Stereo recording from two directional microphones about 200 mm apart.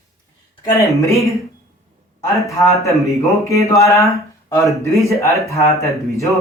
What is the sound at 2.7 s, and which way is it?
Speech, 15° left (ahead or behind).